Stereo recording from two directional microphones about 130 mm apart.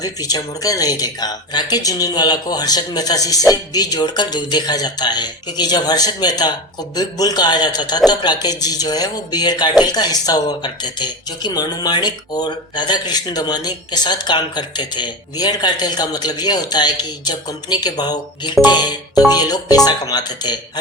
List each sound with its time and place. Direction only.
0.0 s a man's voice: 30° left (ahead or behind)